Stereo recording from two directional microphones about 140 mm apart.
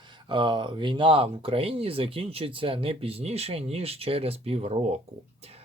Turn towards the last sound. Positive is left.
turn(degrees=-45)  # may be behind; listen again after turning